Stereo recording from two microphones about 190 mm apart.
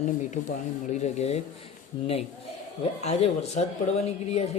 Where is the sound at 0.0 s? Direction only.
40° left (ahead or behind).